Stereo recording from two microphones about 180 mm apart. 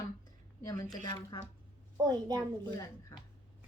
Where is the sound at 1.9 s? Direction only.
25° right (ahead or behind).